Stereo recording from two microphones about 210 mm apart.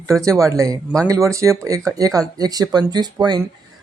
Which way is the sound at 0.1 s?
5° left (ahead or behind).